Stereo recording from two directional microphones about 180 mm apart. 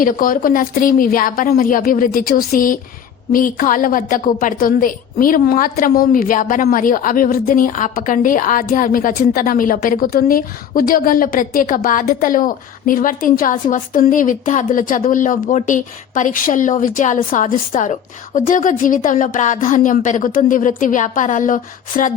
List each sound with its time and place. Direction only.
0.0 s a woman's voice: 50° left (ahead or behind)